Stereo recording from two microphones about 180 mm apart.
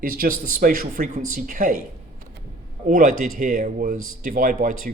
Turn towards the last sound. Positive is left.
turn(degrees=-50)  # may be behind; listen again after turning